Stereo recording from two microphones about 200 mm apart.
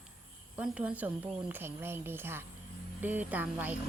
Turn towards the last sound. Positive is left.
turn(degrees=-10)  # may be behind; listen again after turning